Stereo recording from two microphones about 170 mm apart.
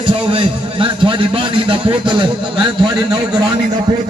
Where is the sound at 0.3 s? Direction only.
30° right (ahead or behind).